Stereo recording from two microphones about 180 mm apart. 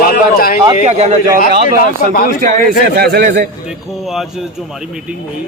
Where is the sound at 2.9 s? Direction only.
60° right (ahead or behind).